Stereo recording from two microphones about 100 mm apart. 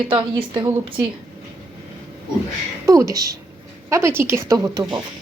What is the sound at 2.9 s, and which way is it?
Speech, 35° right (ahead or behind).